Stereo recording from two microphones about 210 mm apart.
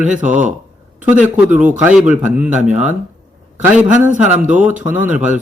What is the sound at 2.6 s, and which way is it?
Speech, 35° right (ahead or behind).